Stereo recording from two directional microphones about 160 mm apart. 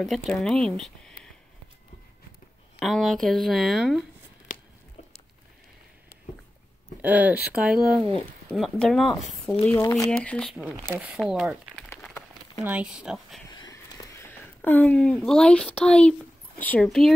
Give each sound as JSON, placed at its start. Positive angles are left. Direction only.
{"t": 0.0, "sound": "speech", "side_deg": 5}
{"t": 2.8, "sound": "speech", "side_deg": 0}
{"t": 7.0, "sound": "speech", "side_deg": -10}
{"t": 9.7, "sound": "speech", "side_deg": 15}
{"t": 10.9, "sound": "speech", "side_deg": -10}
{"t": 12.0, "sound": "a sound", "side_deg": 0}
{"t": 12.6, "sound": "speech", "side_deg": -5}
{"t": 13.5, "sound": "a sound", "side_deg": 25}